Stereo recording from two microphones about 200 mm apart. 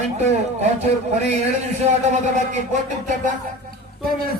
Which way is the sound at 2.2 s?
35° right (ahead or behind).